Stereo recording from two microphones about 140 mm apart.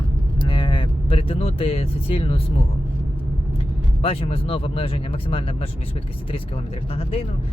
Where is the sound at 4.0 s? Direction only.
40° left (ahead or behind).